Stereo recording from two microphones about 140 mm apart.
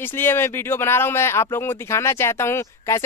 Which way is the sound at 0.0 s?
15° left (ahead or behind).